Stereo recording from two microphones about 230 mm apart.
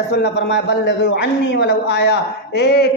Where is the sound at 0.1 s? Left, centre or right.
Left.